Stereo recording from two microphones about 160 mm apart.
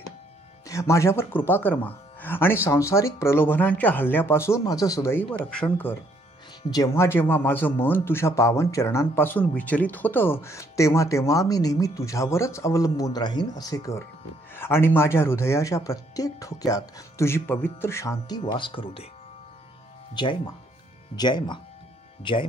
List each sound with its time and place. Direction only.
0.7 s speech: 20° left (ahead or behind)
5.4 s speech: 5° left (ahead or behind)
6.7 s speech: 20° left (ahead or behind)
18.4 s speech: 30° left (ahead or behind)
21.2 s speech: 30° left (ahead or behind)